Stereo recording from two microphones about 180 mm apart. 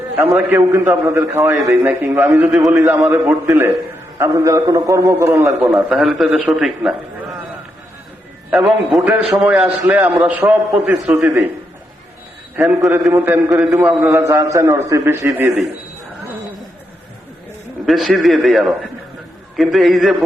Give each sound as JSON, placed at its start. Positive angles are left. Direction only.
{"t": 0.3, "sound": "a man's voice", "side_deg": -10}
{"t": 5.5, "sound": "a man's voice", "side_deg": -5}
{"t": 8.4, "sound": "a man's voice", "side_deg": -5}
{"t": 12.5, "sound": "a man's voice", "side_deg": -10}
{"t": 17.8, "sound": "a man's voice", "side_deg": 0}